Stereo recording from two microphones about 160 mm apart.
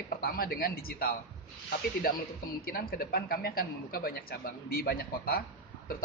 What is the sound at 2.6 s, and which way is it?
A man's voice, 70° left (ahead or behind).